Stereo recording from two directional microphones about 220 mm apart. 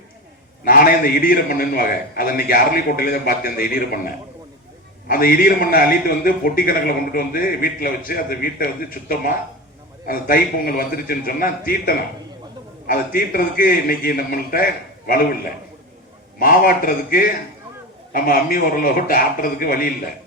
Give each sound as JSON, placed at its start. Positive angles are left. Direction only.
{"t": 0.6, "sound": "a man's voice", "side_deg": 40}
{"t": 5.0, "sound": "a man's voice", "side_deg": 40}
{"t": 16.4, "sound": "a man's voice", "side_deg": 40}